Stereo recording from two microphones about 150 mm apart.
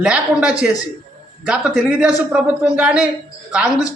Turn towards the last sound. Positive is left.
turn(degrees=-5)  # may be behind; listen again after turning